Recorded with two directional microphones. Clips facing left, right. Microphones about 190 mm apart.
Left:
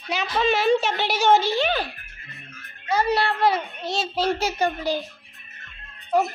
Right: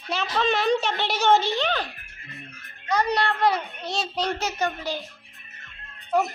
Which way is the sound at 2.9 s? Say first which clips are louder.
Left 2 dB; 5° left (ahead or behind).